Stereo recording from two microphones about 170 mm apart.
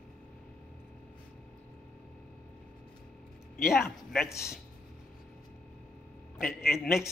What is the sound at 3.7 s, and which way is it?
Speech, centre (ahead or behind).